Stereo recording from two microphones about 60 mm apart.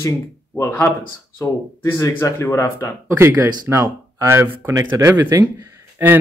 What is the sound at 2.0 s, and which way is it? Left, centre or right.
Speech, left.